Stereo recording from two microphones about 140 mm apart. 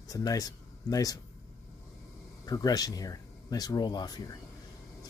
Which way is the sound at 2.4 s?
25° left (ahead or behind).